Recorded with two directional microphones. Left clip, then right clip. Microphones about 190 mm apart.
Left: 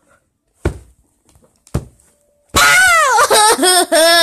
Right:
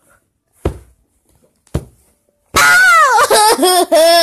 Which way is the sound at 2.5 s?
Centre (ahead or behind).